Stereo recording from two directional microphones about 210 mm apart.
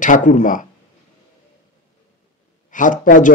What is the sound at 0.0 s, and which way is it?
Speech, 40° left (ahead or behind).